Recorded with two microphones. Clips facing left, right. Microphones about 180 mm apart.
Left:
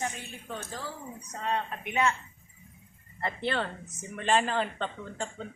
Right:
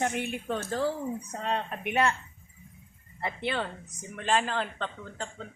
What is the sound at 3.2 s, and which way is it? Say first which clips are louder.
A woman's voice: left 1 dB; 5° right (ahead or behind).